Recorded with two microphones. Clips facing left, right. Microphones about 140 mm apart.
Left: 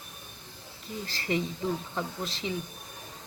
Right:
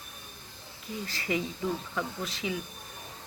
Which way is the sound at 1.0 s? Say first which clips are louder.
Left 2 dB; 30° left (ahead or behind).